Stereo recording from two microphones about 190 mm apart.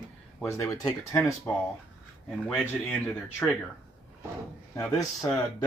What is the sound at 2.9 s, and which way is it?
Speech, 10° left (ahead or behind).